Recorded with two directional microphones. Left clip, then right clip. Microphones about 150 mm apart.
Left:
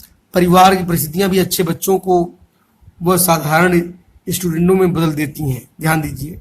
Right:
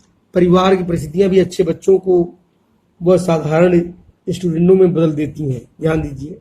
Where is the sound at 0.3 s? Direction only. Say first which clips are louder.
Left 3 dB; 35° left (ahead or behind).